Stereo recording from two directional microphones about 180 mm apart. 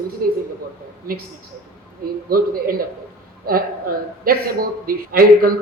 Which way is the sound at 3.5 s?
55° right (ahead or behind).